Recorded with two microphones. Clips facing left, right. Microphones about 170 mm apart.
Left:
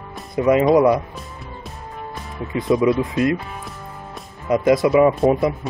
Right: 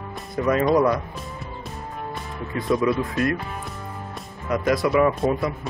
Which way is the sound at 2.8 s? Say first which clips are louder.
Left 4 dB; 20° left (ahead or behind).